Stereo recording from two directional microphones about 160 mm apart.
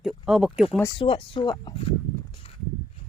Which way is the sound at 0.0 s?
Centre (ahead or behind).